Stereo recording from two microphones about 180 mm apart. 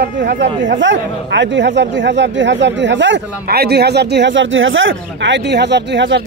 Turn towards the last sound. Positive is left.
turn(degrees=-85)